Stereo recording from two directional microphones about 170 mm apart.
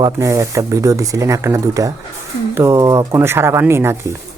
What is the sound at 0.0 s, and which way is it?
Speech, 20° right (ahead or behind).